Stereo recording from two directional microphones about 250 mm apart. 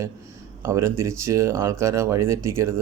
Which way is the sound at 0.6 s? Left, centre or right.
Centre.